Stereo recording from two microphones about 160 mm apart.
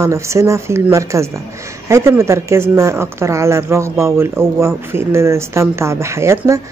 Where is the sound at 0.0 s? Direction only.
20° right (ahead or behind).